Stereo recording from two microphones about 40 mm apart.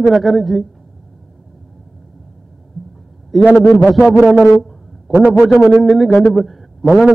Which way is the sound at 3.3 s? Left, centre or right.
Centre.